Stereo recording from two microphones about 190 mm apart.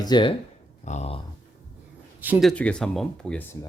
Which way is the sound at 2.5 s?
5° left (ahead or behind).